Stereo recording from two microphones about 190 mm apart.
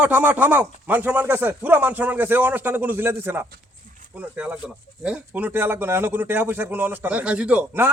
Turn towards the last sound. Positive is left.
turn(degrees=-10)  # may be behind; listen again after turning